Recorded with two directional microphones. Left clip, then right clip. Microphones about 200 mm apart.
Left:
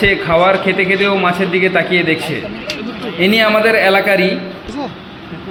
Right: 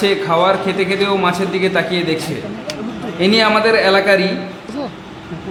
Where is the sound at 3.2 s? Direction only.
Centre (ahead or behind).